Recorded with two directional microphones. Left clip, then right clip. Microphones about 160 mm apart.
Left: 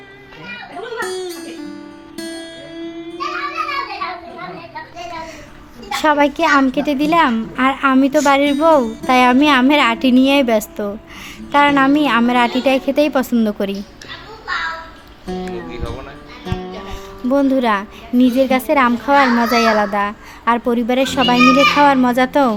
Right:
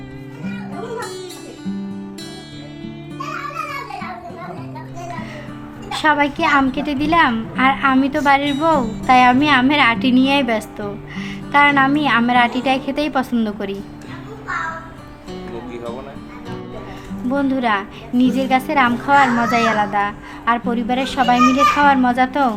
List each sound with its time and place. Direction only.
5.9 s a woman's voice: 40° left (ahead or behind)
17.3 s a woman's voice: 40° left (ahead or behind)